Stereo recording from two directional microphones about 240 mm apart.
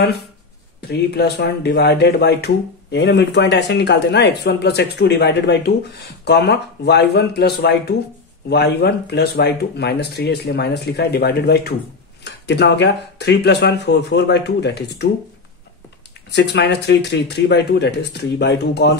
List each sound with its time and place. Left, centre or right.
0.7 s speech: left
16.3 s speech: left